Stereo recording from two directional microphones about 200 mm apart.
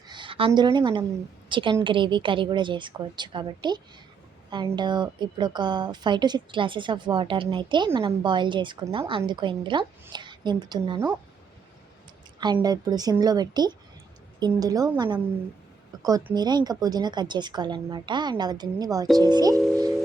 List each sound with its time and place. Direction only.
0.1 s a woman's voice: 25° right (ahead or behind)
12.6 s a woman's voice: 20° right (ahead or behind)